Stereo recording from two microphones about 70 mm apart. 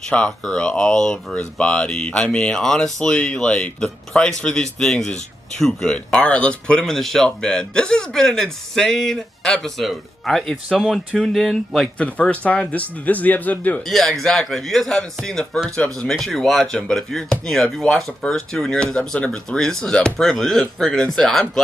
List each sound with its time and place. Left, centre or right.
0.1 s a man's voice: centre
12.0 s speech: centre
13.8 s a man's voice: centre